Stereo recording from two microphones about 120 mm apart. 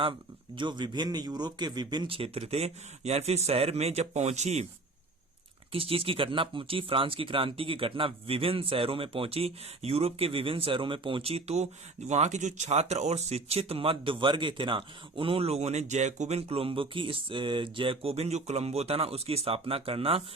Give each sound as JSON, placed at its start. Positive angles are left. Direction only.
{"t": 0.5, "sound": "a man's voice", "side_deg": -40}
{"t": 2.0, "sound": "speech", "side_deg": -50}
{"t": 5.7, "sound": "speech", "side_deg": -50}